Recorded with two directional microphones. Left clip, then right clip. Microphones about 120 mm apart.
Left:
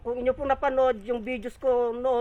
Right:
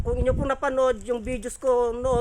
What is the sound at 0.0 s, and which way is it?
Speech, 30° right (ahead or behind).